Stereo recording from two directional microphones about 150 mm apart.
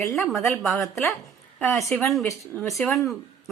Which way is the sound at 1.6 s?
15° left (ahead or behind).